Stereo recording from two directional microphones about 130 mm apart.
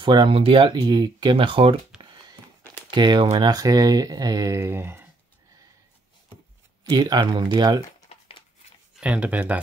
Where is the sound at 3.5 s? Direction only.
30° right (ahead or behind).